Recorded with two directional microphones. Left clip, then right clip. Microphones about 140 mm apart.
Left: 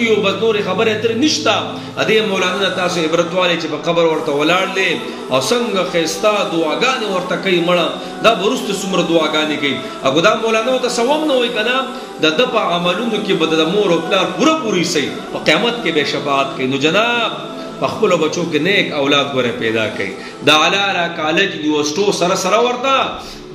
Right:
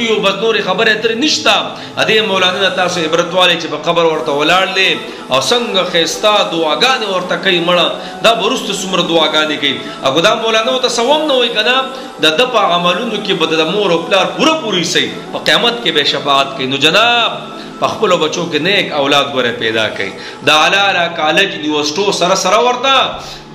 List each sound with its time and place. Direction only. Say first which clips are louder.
0.0 s a man's voice: right 2 dB; 20° left (ahead or behind)